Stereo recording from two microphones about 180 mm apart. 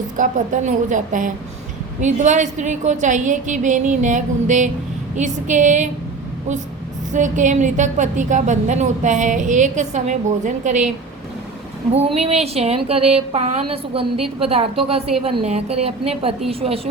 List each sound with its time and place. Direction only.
0.2 s a woman's voice: 45° right (ahead or behind)
7.1 s a woman's voice: 45° right (ahead or behind)
12.0 s a woman's voice: 35° right (ahead or behind)